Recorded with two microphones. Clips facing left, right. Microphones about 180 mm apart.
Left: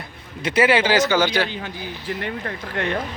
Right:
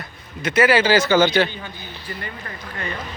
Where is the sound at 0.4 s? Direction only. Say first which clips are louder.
Right 1 dB; 30° left (ahead or behind).